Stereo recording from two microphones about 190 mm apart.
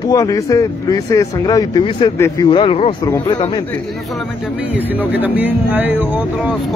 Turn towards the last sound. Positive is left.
turn(degrees=-10)  # may be behind; listen again after turning